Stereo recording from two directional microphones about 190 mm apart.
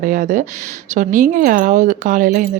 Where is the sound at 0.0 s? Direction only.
45° right (ahead or behind).